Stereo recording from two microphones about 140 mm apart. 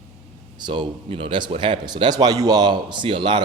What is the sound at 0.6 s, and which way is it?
A man's voice, 35° right (ahead or behind).